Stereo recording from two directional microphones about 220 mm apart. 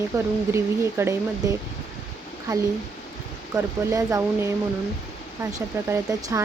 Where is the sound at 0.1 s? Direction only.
15° right (ahead or behind).